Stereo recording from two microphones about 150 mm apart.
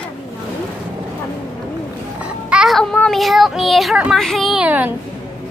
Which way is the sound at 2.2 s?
5° right (ahead or behind).